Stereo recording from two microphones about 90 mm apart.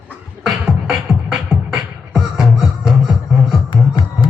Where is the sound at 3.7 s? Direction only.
60° left (ahead or behind).